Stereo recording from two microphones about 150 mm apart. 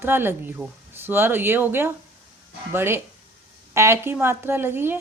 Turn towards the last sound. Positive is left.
turn(degrees=-15)  # may be behind; listen again after turning